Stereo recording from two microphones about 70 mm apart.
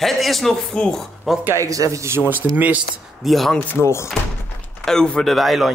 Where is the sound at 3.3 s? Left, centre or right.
Centre.